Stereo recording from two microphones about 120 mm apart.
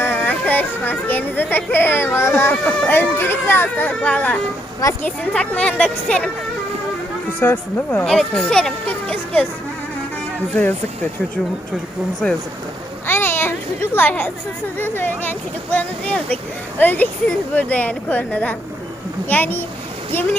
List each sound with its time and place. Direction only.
0.0 s speech: 15° left (ahead or behind)
7.3 s speech: 15° left (ahead or behind)
8.0 s speech: 5° left (ahead or behind)
8.9 s a sound: 15° left (ahead or behind)
10.5 s speech: 15° left (ahead or behind)
12.2 s speech: 5° left (ahead or behind)
13.1 s a sound: 20° left (ahead or behind)
14.8 s speech: 15° left (ahead or behind)